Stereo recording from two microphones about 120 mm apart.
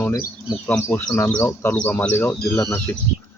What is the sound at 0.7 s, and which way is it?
Speech, 10° left (ahead or behind).